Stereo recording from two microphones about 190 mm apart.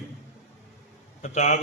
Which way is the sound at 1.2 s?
35° left (ahead or behind).